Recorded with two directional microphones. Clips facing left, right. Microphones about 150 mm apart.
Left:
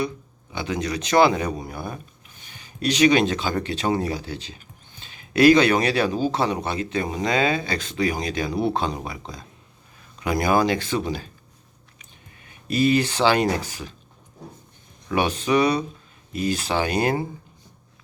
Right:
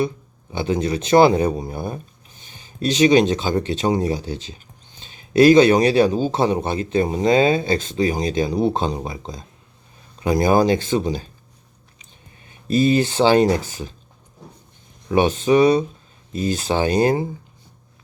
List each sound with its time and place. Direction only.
0.6 s speech: 30° right (ahead or behind)
12.5 s speech: 25° right (ahead or behind)
15.1 s speech: 25° right (ahead or behind)